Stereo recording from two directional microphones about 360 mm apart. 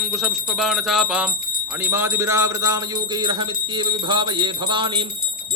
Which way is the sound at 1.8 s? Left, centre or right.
Centre.